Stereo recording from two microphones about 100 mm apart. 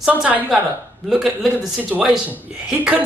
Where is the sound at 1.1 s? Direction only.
5° right (ahead or behind).